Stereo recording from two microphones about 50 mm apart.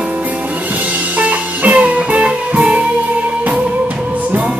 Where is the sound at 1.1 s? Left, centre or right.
Right.